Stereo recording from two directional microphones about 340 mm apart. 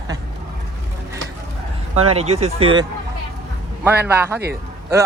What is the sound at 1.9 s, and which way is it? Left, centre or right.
Speech, centre.